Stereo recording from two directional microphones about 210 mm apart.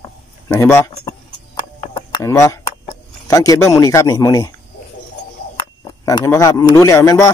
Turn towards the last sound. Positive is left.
turn(degrees=15)  # may be behind; listen again after turning